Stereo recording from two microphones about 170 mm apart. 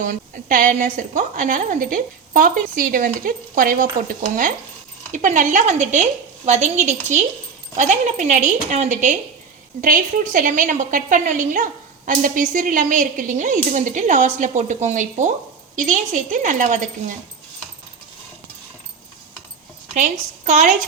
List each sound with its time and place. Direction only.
0.0 s a woman's voice: 50° right (ahead or behind)
19.9 s a woman's voice: 45° right (ahead or behind)